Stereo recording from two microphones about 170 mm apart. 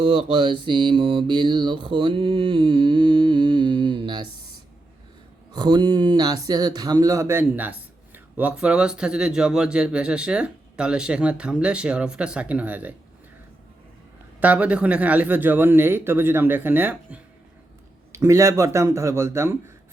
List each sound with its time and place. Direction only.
0.0 s mantra: 35° right (ahead or behind)
5.5 s speech: 25° right (ahead or behind); by 13.0 s 10° right (ahead or behind)
14.4 s speech: 10° right (ahead or behind)